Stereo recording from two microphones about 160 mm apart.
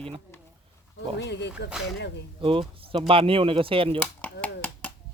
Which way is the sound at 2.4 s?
35° right (ahead or behind).